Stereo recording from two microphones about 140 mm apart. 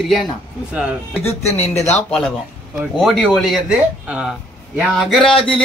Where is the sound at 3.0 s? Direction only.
Centre (ahead or behind).